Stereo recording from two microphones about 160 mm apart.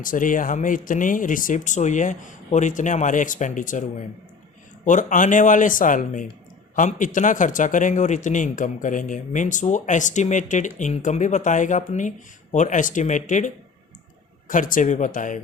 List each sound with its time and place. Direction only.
0.0 s speech: 55° left (ahead or behind)
4.9 s speech: 50° left (ahead or behind)